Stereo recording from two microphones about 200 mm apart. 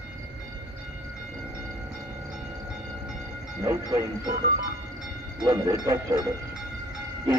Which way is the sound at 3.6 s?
20° right (ahead or behind).